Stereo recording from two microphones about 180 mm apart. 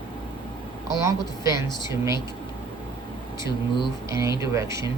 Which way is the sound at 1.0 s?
15° right (ahead or behind).